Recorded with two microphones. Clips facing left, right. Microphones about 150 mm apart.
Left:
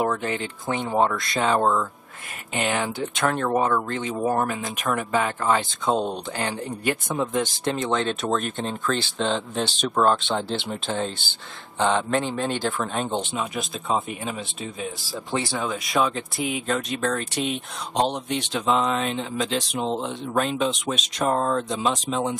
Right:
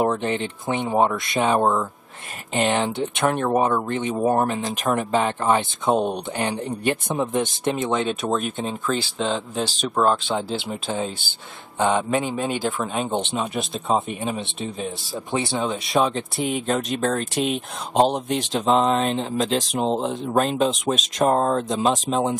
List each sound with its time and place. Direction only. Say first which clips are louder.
0.0 s speech: right 3 dB; 25° right (ahead or behind)
7.6 s speech: right 2 dB; 10° right (ahead or behind)
13.2 s speech: right 3 dB; 25° right (ahead or behind)
16.3 s speech: right 3 dB; centre (ahead or behind)
16.6 s speech: right 2 dB; 40° right (ahead or behind)
17.3 s speech: right 3 dB; centre (ahead or behind)
17.9 s speech: right 5 dB; 40° right (ahead or behind)